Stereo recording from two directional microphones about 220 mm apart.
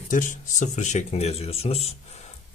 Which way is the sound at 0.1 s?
35° left (ahead or behind).